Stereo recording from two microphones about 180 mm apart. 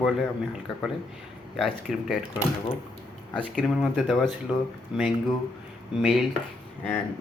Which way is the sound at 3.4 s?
5° left (ahead or behind).